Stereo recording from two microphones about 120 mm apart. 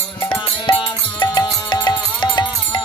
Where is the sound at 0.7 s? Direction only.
45° left (ahead or behind).